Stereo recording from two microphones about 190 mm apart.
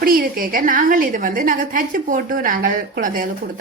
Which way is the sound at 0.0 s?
50° right (ahead or behind).